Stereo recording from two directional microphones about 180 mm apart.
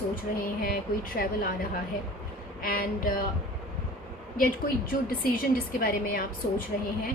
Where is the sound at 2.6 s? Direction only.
55° left (ahead or behind).